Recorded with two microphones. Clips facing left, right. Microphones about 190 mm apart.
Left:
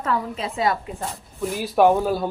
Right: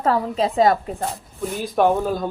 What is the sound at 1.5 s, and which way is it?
Speech, 5° left (ahead or behind).